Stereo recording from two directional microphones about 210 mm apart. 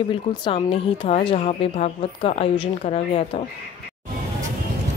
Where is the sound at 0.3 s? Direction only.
25° left (ahead or behind).